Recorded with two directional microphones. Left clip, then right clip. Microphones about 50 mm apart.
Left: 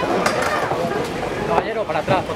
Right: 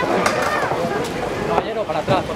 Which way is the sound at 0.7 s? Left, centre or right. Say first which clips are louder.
Even; centre.